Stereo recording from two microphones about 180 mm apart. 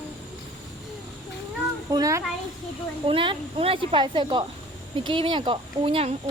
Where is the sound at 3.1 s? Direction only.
30° right (ahead or behind).